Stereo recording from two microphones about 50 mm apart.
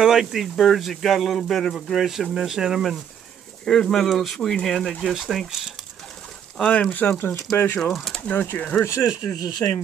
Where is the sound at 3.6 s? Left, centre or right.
Centre.